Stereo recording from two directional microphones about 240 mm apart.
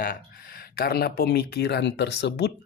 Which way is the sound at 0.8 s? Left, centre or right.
Left.